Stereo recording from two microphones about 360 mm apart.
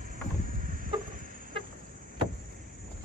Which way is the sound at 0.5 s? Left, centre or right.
Right.